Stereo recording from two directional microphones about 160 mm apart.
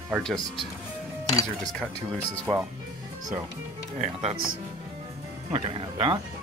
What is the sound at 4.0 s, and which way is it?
Speech, 45° right (ahead or behind).